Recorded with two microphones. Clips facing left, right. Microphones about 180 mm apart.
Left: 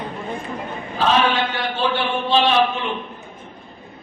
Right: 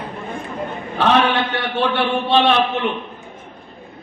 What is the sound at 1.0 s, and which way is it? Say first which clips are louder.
A man's voice: right 2 dB; 65° right (ahead or behind).